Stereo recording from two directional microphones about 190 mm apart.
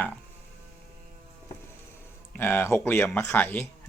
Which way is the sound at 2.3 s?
10° left (ahead or behind).